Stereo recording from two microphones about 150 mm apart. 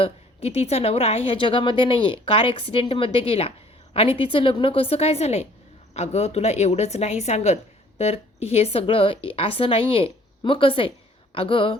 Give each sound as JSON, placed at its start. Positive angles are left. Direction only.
{"t": 0.0, "sound": "a woman's voice", "side_deg": 40}